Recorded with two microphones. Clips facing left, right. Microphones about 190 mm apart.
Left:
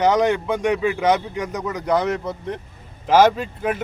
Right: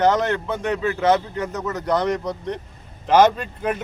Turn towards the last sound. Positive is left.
turn(degrees=5)  # may be behind; listen again after turning